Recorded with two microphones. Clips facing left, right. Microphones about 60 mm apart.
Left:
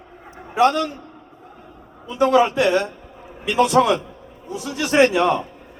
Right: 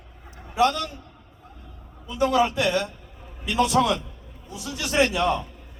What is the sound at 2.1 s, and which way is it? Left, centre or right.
A man's voice, left.